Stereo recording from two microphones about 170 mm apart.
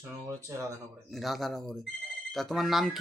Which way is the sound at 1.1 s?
Centre (ahead or behind).